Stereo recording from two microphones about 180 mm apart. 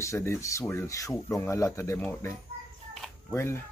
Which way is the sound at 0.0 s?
15° left (ahead or behind).